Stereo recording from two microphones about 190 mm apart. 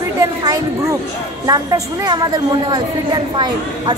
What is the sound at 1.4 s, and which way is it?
A woman's voice, 20° right (ahead or behind).